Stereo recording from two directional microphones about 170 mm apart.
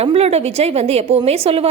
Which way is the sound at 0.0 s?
35° right (ahead or behind).